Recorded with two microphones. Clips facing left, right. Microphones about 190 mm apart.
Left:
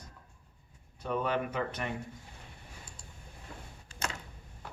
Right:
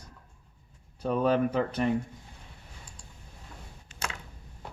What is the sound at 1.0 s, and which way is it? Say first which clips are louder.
Speech: right 7 dB; 35° right (ahead or behind).